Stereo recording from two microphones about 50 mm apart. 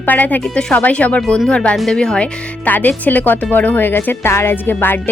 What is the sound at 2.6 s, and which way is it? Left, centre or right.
A woman's voice, left.